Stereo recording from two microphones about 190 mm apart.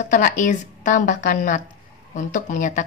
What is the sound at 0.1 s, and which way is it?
Speech, 40° left (ahead or behind).